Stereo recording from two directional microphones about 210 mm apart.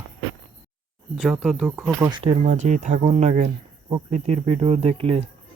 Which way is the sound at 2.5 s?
35° right (ahead or behind).